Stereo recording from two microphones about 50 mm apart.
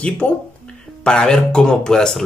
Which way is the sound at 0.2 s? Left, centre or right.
Left.